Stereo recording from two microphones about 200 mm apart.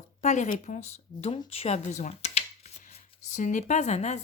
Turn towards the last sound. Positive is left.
turn(degrees=35)  # may be behind; listen again after turning